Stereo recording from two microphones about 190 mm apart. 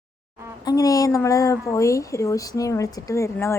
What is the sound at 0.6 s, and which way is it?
A woman's voice, 20° left (ahead or behind).